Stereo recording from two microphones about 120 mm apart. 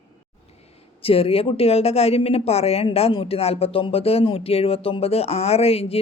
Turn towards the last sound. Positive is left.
turn(degrees=55)  # may be behind; listen again after turning